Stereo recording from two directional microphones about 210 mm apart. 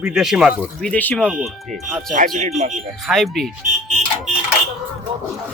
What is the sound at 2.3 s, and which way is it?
Speech, 35° right (ahead or behind).